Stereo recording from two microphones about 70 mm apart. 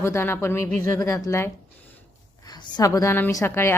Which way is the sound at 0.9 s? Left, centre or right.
Left.